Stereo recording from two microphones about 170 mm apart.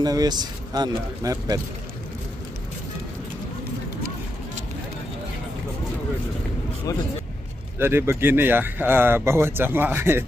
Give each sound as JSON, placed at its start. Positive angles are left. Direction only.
{"t": 0.0, "sound": "speech", "side_deg": -25}
{"t": 7.8, "sound": "speech", "side_deg": -15}